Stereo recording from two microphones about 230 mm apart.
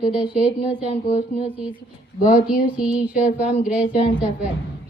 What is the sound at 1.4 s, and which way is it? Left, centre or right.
A woman's voice, centre.